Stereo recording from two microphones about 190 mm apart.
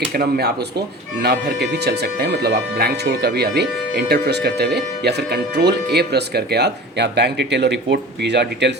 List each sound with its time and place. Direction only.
0.1 s speech: 55° right (ahead or behind)